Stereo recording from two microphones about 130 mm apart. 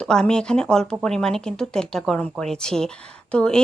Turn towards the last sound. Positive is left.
turn(degrees=5)  # may be behind; listen again after turning